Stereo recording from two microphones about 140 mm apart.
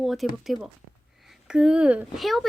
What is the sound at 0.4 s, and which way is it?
Speech, centre (ahead or behind).